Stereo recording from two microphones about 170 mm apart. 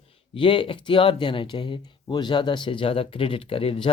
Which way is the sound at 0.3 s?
30° left (ahead or behind).